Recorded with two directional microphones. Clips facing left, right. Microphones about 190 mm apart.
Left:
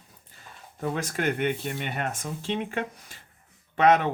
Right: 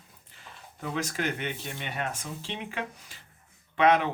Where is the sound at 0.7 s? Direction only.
50° left (ahead or behind).